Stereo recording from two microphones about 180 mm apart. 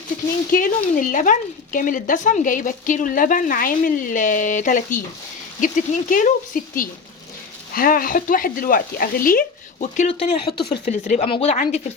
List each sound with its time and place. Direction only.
0.5 s speech: 50° left (ahead or behind)
11.3 s speech: 35° left (ahead or behind)
11.5 s speech: 45° left (ahead or behind)